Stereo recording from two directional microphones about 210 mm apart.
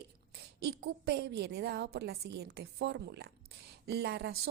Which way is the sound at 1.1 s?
50° right (ahead or behind).